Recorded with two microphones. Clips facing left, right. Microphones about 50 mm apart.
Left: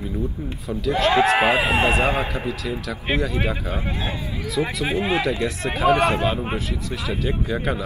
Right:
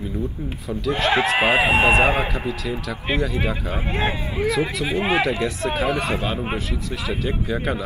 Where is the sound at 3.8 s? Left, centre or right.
Right.